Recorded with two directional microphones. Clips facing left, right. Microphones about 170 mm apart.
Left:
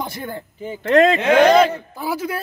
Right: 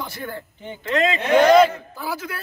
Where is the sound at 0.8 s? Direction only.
55° left (ahead or behind); by 1.4 s 75° left (ahead or behind).